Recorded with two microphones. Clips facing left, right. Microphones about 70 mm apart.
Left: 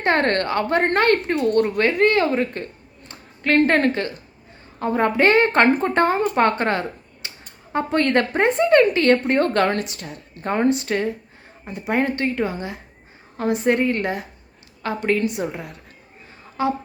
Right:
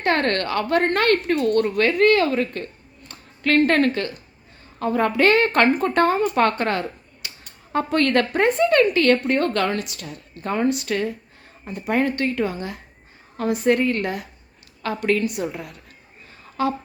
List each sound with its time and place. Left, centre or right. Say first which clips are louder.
0.0 s a woman's voice: left 2 dB; left
3.1 s a sound: even; left
3.7 s a woman's voice: even; left
11.6 s a woman's voice: even; centre